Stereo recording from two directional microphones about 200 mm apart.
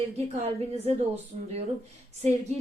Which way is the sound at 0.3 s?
30° right (ahead or behind).